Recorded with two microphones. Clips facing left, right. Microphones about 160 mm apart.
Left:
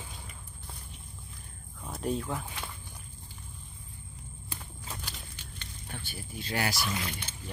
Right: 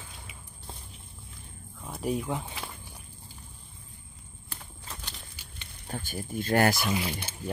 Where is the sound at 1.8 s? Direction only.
5° right (ahead or behind).